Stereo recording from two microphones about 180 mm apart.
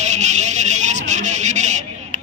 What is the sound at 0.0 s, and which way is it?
Music, 40° right (ahead or behind).